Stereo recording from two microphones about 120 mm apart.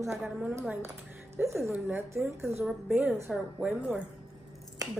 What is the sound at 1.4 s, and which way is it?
A woman's voice, 25° right (ahead or behind).